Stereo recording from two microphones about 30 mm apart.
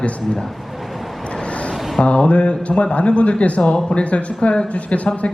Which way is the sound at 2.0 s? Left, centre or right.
Left.